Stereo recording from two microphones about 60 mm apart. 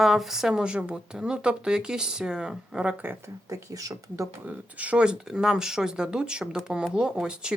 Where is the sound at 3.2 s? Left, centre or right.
Right.